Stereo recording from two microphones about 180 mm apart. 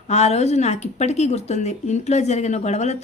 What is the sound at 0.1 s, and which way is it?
A woman's voice, 40° left (ahead or behind).